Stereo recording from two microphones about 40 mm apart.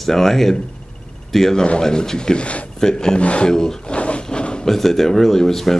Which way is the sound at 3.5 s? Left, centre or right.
Centre.